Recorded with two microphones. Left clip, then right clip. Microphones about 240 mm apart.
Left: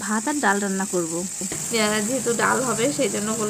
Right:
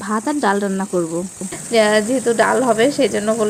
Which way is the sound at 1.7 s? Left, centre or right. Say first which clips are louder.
Right 9 dB; right.